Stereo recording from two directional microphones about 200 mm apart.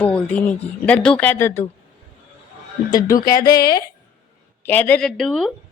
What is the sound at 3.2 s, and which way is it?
Speech, 20° left (ahead or behind).